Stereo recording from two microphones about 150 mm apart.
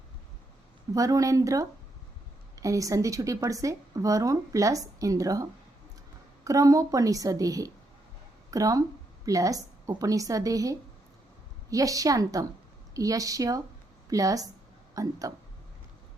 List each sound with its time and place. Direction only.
0.9 s a woman's voice: 20° right (ahead or behind)